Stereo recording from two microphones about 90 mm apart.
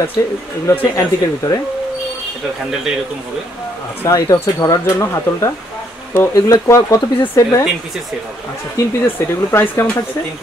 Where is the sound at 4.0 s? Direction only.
40° left (ahead or behind).